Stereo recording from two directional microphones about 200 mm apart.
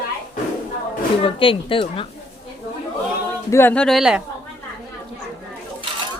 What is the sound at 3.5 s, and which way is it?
Speech, 10° left (ahead or behind).